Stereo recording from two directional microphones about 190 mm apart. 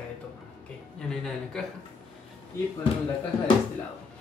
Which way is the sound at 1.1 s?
5° left (ahead or behind).